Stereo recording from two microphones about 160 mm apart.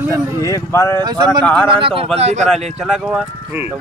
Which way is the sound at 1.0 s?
25° right (ahead or behind).